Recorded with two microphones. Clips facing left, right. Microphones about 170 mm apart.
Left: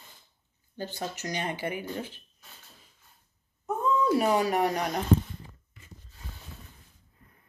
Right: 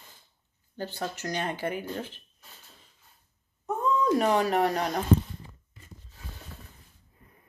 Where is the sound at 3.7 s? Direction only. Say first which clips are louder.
Even; 10° left (ahead or behind).